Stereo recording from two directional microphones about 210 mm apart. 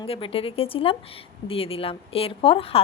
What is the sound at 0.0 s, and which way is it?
A woman's voice, 25° left (ahead or behind).